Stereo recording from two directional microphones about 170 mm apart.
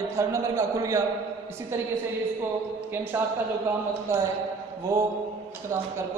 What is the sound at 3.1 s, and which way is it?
A man's voice, 10° right (ahead or behind).